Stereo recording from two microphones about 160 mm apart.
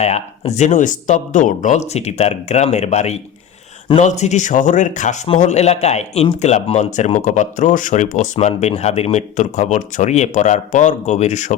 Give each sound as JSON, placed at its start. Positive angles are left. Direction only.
{"t": 0.0, "sound": "speech", "side_deg": 45}